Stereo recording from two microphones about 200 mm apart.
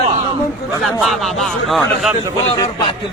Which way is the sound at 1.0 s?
Centre (ahead or behind).